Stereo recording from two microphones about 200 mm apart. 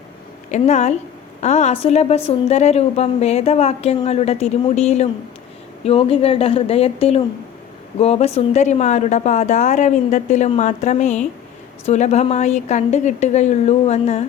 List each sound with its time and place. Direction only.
0.5 s a woman's voice: 35° left (ahead or behind)